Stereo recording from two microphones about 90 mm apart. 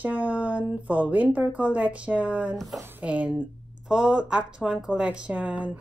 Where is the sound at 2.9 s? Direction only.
15° right (ahead or behind).